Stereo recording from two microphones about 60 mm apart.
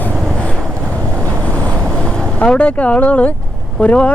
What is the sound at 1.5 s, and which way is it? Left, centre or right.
Vehicle, left.